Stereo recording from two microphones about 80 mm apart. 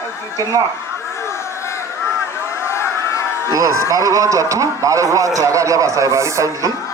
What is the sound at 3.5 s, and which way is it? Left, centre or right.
A man's voice, right.